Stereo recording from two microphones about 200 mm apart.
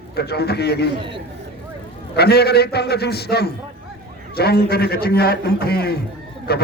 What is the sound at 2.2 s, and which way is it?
A man's voice, 55° left (ahead or behind).